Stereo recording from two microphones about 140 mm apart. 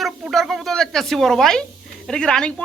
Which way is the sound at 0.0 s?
Centre (ahead or behind).